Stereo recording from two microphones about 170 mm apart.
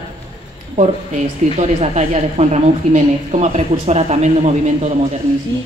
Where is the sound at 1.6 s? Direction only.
40° right (ahead or behind).